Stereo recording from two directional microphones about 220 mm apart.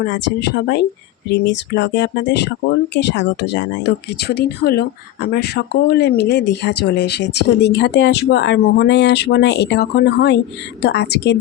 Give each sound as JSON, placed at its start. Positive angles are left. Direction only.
{"t": 0.0, "sound": "speech", "side_deg": 50}